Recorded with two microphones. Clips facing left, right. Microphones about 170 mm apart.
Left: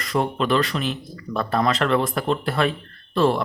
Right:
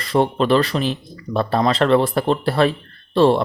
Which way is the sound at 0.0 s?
30° right (ahead or behind).